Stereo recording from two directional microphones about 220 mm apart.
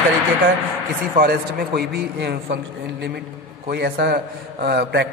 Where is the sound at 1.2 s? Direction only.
45° right (ahead or behind).